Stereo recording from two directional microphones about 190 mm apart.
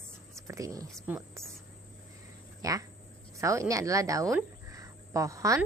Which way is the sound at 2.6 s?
20° right (ahead or behind).